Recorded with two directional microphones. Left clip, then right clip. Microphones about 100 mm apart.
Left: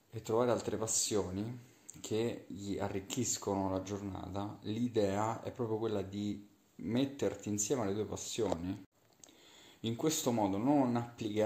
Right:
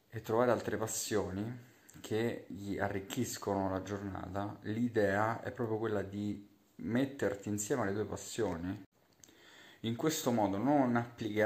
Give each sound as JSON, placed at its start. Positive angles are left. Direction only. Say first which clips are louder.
{"t": 0.1, "sound": "speech", "louder": "right 1 dB", "side_deg": 10}
{"t": 9.8, "sound": "speech", "louder": "even", "side_deg": 20}